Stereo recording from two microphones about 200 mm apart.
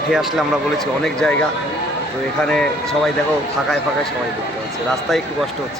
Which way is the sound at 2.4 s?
5° left (ahead or behind).